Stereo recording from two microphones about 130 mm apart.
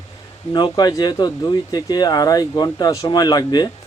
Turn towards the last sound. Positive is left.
turn(degrees=35)  # may be behind; listen again after turning